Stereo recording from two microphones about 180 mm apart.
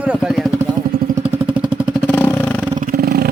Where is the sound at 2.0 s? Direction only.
10° left (ahead or behind).